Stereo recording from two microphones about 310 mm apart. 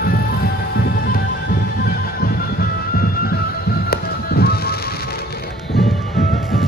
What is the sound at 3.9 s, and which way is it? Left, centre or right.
Music, left.